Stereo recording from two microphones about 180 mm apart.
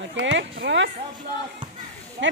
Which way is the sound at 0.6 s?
75° right (ahead or behind).